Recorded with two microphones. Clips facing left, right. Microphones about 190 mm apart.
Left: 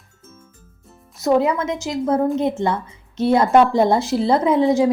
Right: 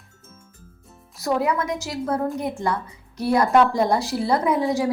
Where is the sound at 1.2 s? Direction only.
20° left (ahead or behind).